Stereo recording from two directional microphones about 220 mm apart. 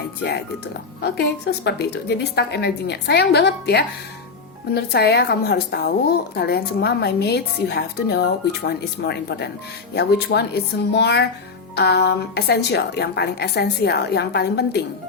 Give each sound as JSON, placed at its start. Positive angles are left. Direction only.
{"t": 0.2, "sound": "a woman's voice", "side_deg": 50}